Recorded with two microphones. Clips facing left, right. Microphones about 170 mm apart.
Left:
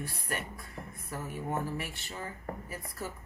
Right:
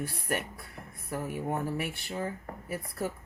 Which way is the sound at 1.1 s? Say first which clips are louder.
Right 3 dB; 65° right (ahead or behind).